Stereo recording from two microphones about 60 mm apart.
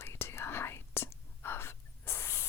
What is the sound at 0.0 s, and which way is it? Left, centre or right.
Whispering, left.